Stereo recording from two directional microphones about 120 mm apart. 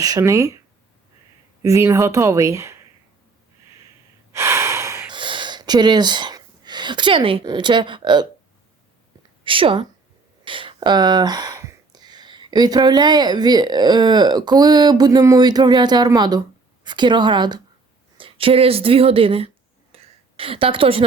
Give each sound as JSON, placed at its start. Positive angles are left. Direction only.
{"t": 0.2, "sound": "speech", "side_deg": -25}
{"t": 1.6, "sound": "speech", "side_deg": -25}
{"t": 4.3, "sound": "gasp", "side_deg": -25}
{"t": 5.1, "sound": "a sound", "side_deg": -40}
{"t": 7.4, "sound": "speech", "side_deg": -40}
{"t": 9.4, "sound": "speech", "side_deg": -45}
{"t": 19.9, "sound": "a sound", "side_deg": -50}